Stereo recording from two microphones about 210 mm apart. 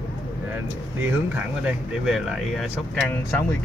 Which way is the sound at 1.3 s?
5° right (ahead or behind).